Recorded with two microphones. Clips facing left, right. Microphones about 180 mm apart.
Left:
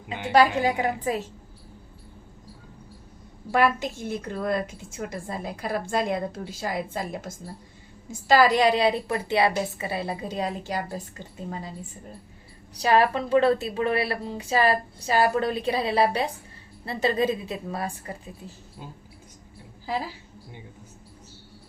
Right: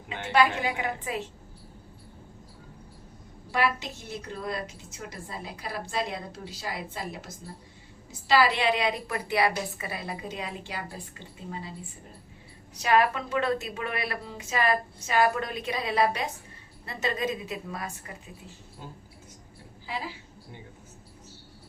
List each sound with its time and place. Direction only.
0.3 s a woman's voice: 40° left (ahead or behind)
3.5 s a woman's voice: 50° left (ahead or behind)
12.7 s a woman's voice: 35° left (ahead or behind)
19.9 s a woman's voice: 40° left (ahead or behind)